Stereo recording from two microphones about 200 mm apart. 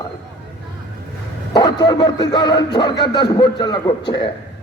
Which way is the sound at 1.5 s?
20° left (ahead or behind).